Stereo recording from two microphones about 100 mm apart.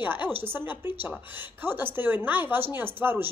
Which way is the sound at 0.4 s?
20° right (ahead or behind).